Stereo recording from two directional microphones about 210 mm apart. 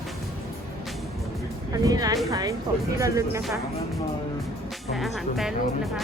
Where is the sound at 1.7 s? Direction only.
15° right (ahead or behind).